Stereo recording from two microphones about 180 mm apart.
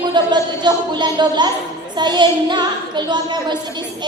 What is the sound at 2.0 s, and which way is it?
Speech, 25° right (ahead or behind).